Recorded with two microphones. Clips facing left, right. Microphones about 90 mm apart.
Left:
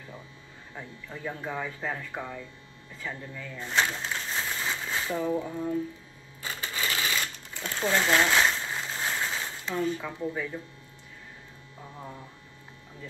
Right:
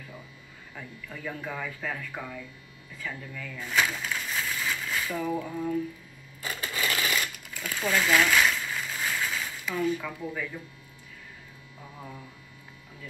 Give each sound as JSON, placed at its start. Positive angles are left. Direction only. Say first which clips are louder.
{"t": 0.7, "sound": "speech", "louder": "left 1 dB", "side_deg": 25}
{"t": 6.4, "sound": "sewing machine", "louder": "right 2 dB", "side_deg": 25}